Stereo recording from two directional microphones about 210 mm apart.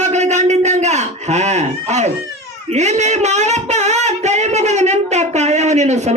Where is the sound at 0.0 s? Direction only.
35° right (ahead or behind).